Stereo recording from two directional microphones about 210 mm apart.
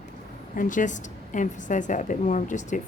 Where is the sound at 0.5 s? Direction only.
40° left (ahead or behind).